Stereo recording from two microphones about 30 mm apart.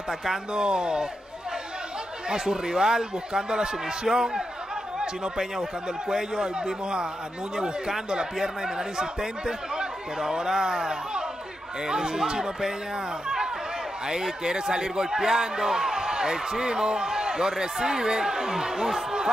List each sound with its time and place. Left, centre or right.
0.6 s speech: right
2.2 s speech: centre
5.4 s speech: right
8.1 s speech: right
14.0 s a man's voice: centre